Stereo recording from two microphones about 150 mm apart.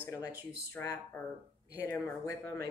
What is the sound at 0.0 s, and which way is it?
Speech, 20° left (ahead or behind).